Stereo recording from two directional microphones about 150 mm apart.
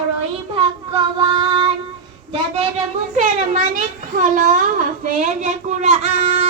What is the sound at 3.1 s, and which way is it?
A child's voice, 50° right (ahead or behind).